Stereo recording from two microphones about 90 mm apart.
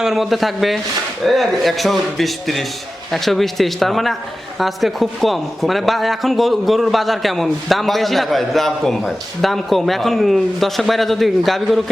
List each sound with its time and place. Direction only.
0.0 s a man's voice: 5° right (ahead or behind)